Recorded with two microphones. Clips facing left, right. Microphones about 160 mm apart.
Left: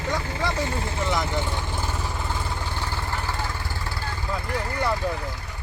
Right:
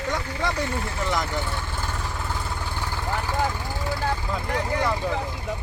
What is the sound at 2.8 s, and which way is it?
Vehicle, 10° right (ahead or behind).